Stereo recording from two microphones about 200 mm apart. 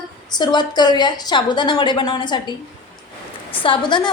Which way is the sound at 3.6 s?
25° left (ahead or behind).